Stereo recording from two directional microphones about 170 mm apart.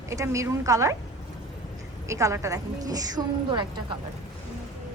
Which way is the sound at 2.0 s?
20° right (ahead or behind).